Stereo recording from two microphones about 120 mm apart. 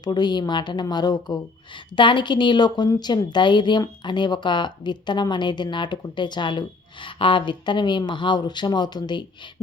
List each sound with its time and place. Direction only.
0.0 s a woman's voice: 35° left (ahead or behind)